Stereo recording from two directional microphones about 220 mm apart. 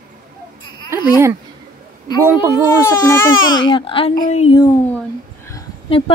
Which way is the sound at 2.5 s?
15° left (ahead or behind).